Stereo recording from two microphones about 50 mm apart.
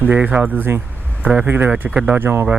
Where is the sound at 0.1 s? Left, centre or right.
Right.